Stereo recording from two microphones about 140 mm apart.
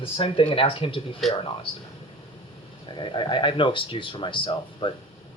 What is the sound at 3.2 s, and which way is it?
A man's voice, 35° left (ahead or behind).